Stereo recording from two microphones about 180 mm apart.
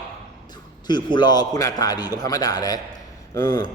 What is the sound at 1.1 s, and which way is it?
A man's voice, 20° left (ahead or behind).